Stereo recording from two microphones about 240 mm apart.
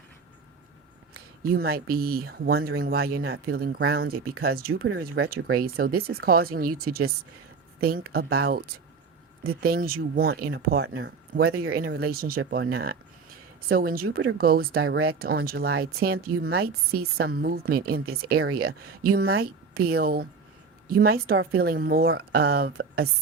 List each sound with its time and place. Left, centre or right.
1.5 s a woman's voice: right
11.5 s speech: right
12.1 s a woman's voice: right